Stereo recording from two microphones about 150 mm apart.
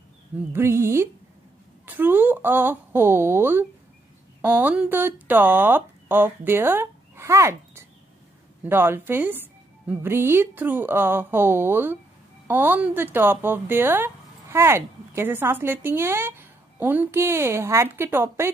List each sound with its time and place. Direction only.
0.5 s speech: 15° right (ahead or behind)